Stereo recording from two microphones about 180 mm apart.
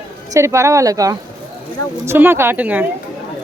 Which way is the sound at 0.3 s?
15° right (ahead or behind).